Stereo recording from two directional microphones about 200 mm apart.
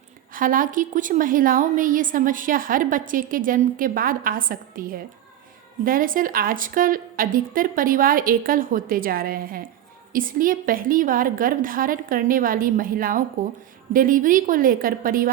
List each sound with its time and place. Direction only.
0.3 s a woman's voice: 45° right (ahead or behind)